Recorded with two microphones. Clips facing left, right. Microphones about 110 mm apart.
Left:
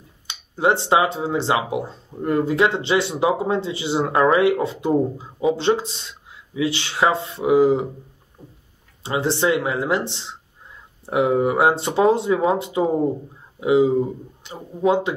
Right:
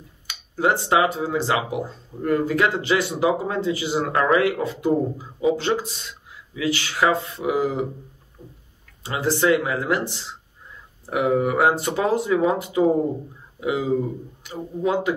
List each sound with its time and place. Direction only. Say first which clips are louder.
0.3 s speech: left 2 dB; 25° left (ahead or behind)
9.0 s speech: left 1 dB; 25° left (ahead or behind)